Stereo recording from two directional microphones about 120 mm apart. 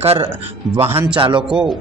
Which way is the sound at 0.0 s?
55° right (ahead or behind).